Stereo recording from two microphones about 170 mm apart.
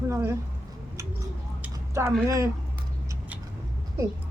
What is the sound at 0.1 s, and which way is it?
Speech, 15° right (ahead or behind).